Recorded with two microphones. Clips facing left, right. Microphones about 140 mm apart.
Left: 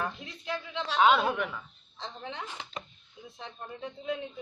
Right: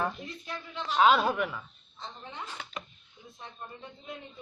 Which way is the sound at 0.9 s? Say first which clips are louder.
Right 1 dB; centre (ahead or behind).